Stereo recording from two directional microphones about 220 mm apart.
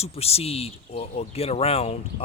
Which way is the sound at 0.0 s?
30° left (ahead or behind).